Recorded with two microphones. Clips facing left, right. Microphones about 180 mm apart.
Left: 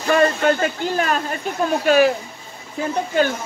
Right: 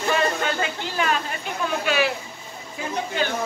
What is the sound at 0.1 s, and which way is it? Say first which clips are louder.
Speech: left 8 dB; 50° left (ahead or behind).